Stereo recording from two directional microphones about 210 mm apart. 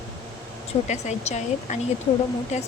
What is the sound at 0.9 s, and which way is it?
A woman's voice, 35° left (ahead or behind).